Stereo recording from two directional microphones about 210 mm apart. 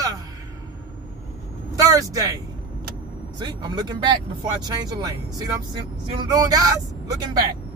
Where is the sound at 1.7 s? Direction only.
15° right (ahead or behind).